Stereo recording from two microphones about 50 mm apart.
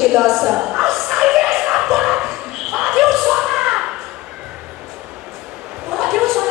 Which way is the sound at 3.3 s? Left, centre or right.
Centre.